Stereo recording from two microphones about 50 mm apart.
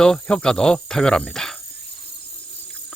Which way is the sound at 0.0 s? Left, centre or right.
Centre.